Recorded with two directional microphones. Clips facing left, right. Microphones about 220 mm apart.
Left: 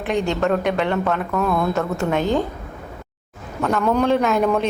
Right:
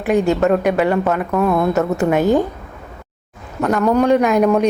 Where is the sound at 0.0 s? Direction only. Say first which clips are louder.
Right 5 dB; 5° right (ahead or behind).